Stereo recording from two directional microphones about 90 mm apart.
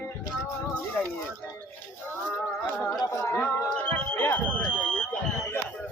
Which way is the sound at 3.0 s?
35° left (ahead or behind).